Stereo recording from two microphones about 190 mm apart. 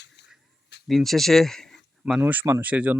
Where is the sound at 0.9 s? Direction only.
Centre (ahead or behind).